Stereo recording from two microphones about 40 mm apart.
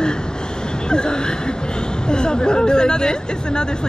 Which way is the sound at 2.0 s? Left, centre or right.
Left.